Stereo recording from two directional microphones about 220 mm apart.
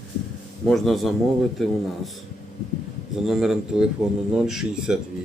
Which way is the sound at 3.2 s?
Centre (ahead or behind).